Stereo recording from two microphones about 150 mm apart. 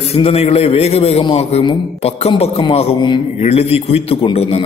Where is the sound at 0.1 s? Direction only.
40° left (ahead or behind).